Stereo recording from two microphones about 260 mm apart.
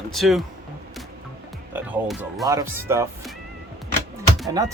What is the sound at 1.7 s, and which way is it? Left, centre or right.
Speech, centre.